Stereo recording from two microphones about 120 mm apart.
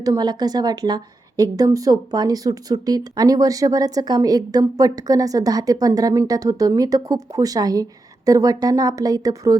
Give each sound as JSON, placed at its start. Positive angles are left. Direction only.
{"t": 0.0, "sound": "a woman's voice", "side_deg": -30}